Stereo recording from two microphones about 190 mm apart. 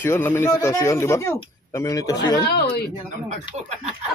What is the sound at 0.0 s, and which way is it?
A man's voice, 10° left (ahead or behind).